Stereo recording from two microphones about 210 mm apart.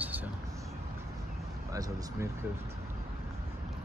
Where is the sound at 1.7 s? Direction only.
15° right (ahead or behind).